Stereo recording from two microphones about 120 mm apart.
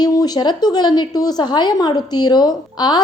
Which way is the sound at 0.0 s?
35° left (ahead or behind).